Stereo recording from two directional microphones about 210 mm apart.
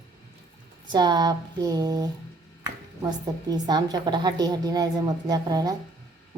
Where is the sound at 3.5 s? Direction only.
20° right (ahead or behind).